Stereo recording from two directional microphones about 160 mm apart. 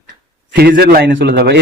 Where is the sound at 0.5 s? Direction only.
80° right.